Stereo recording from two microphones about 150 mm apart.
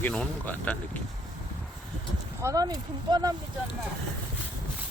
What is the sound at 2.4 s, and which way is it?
Speech, 25° right (ahead or behind).